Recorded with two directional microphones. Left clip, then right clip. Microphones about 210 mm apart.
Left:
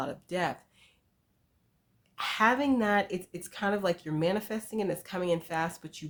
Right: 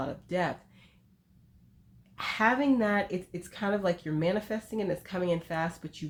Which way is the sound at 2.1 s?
30° left (ahead or behind).